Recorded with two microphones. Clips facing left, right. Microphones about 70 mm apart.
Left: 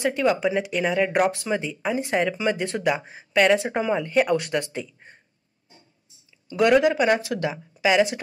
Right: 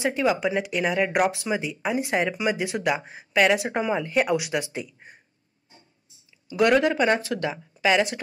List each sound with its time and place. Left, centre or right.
0.1 s speech: centre
6.5 s speech: centre
7.2 s a woman's voice: left
7.5 s speech: centre